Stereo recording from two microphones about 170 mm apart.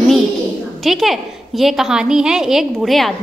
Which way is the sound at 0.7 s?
Centre (ahead or behind).